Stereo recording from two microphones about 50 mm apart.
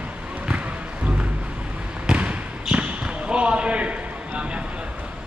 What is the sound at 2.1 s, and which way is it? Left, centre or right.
Basketball bounce, right.